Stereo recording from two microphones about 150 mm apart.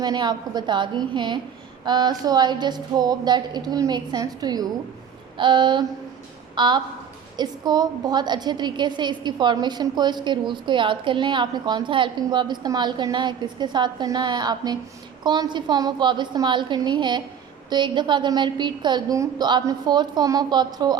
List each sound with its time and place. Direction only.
0.0 s a woman's voice: 25° right (ahead or behind)